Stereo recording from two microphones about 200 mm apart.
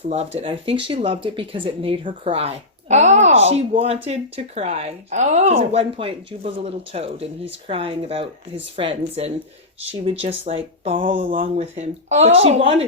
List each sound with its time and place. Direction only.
0.1 s speech: 30° right (ahead or behind)